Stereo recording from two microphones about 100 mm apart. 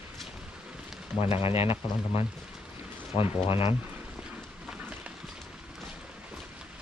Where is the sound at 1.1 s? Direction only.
75° left (ahead or behind).